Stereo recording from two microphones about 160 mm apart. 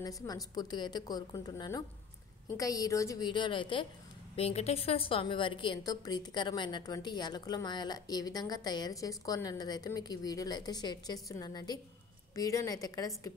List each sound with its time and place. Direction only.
0.0 s a woman's voice: 20° left (ahead or behind)